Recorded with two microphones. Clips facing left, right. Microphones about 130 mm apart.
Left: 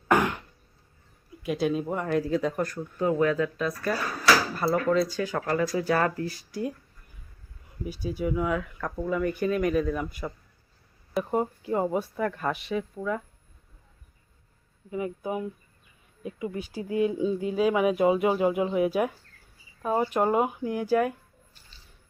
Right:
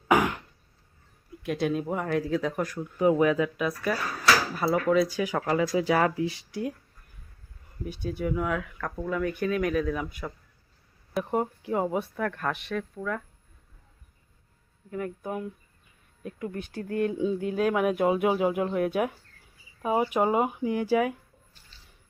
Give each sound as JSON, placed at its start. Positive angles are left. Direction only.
{"t": 0.1, "sound": "throat clearing", "side_deg": 0}
{"t": 1.4, "sound": "speech", "side_deg": 0}
{"t": 3.0, "sound": "speech", "side_deg": -15}
{"t": 6.2, "sound": "speech", "side_deg": -85}
{"t": 7.9, "sound": "speech", "side_deg": 5}
{"t": 14.8, "sound": "speech", "side_deg": 5}